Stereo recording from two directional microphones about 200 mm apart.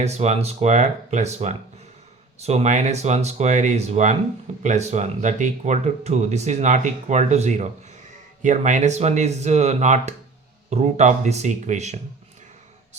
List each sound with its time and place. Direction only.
0.0 s speech: 35° right (ahead or behind)